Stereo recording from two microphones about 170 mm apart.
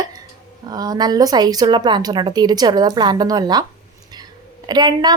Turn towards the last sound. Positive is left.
turn(degrees=-25)  # may be behind; listen again after turning